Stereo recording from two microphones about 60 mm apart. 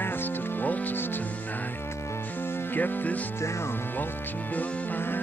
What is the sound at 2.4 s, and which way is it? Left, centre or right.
Music, left.